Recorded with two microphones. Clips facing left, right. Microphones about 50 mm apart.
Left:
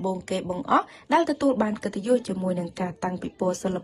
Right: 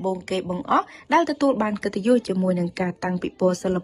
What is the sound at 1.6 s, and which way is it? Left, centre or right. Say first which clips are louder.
Speech: right 3 dB; right.